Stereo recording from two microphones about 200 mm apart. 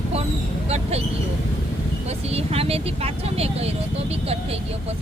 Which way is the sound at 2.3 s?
30° right (ahead or behind).